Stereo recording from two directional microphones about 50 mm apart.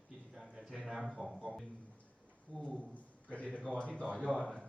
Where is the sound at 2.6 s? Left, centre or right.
Left.